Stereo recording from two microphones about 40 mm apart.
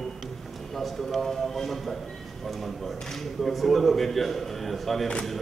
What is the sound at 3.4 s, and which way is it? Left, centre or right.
A man's voice, centre.